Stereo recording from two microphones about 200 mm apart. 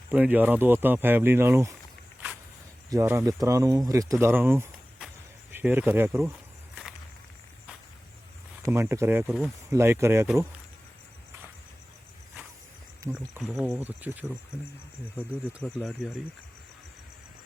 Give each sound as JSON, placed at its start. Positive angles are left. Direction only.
{"t": 0.1, "sound": "speech", "side_deg": -10}
{"t": 2.9, "sound": "speech", "side_deg": -15}
{"t": 4.9, "sound": "insect", "side_deg": -5}
{"t": 8.6, "sound": "speech", "side_deg": -10}
{"t": 13.0, "sound": "speech", "side_deg": -10}
{"t": 13.4, "sound": "speech", "side_deg": 0}